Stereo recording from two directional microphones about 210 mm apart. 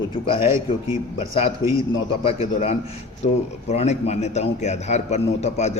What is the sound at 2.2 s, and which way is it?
A man's voice, 30° left (ahead or behind).